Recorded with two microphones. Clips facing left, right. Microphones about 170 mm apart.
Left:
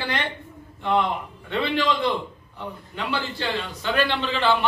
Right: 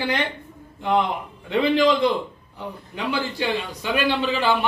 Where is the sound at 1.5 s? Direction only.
20° right (ahead or behind).